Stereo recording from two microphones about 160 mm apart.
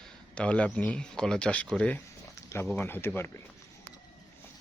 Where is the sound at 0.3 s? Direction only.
5° left (ahead or behind).